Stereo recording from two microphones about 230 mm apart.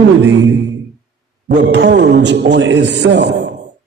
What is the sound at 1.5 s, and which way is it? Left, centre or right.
A woman's voice, right.